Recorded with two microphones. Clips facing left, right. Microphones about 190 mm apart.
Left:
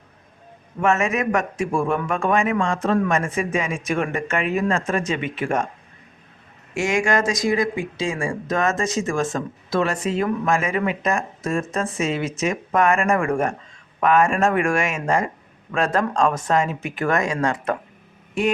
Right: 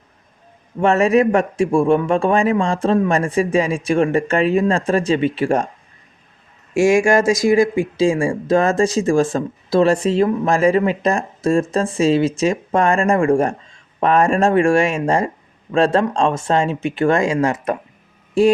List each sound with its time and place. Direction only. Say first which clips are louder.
0.8 s speech: right 7 dB; 35° right (ahead or behind)
6.7 s speech: right 7 dB; 25° right (ahead or behind)